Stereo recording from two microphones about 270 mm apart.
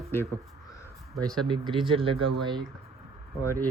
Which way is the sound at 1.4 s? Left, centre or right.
Centre.